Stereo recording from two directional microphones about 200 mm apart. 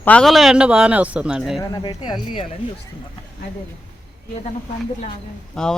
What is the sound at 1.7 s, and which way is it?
Speech, 20° left (ahead or behind).